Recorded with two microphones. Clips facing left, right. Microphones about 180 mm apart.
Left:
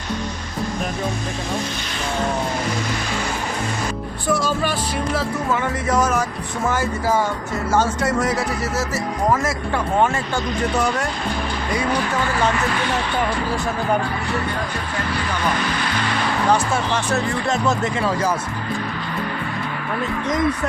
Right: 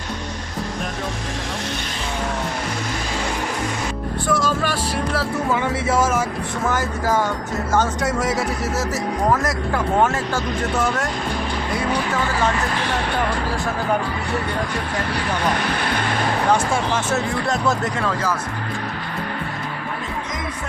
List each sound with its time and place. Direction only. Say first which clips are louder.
4.3 s music: left 1 dB; 25° left (ahead or behind)
5.1 s speech: even; 5° right (ahead or behind)
8.0 s speech: left 1 dB; centre (ahead or behind)
15.5 s speech: right 1 dB; 60° right (ahead or behind)
16.9 s speech: even; 5° right (ahead or behind)